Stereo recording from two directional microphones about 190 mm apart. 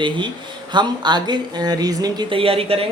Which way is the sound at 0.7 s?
25° right (ahead or behind).